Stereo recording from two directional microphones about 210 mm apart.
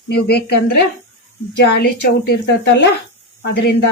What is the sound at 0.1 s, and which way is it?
Speech, 50° left (ahead or behind).